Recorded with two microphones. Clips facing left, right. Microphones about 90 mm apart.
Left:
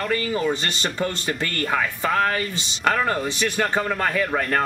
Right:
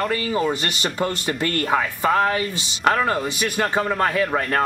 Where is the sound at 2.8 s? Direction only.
5° right (ahead or behind).